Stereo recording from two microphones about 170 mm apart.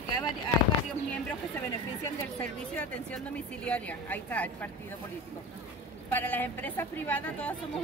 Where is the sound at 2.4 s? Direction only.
5° left (ahead or behind).